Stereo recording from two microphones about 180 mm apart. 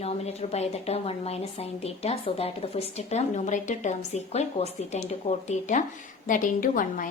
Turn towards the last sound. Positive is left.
turn(degrees=50)  # may be behind; listen again after turning